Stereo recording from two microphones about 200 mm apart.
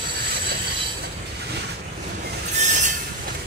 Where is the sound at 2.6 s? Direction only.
35° right (ahead or behind).